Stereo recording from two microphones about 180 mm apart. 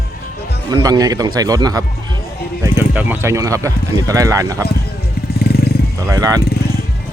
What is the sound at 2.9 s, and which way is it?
Speech, 10° right (ahead or behind).